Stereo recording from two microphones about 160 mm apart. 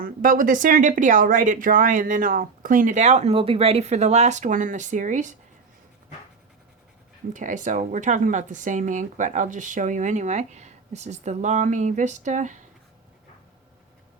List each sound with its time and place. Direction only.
0.0 s speech: 60° right (ahead or behind)
7.3 s speech: 50° right (ahead or behind)